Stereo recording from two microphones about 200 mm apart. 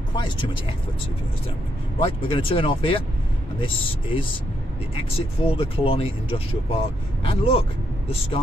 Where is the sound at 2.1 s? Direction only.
25° left (ahead or behind).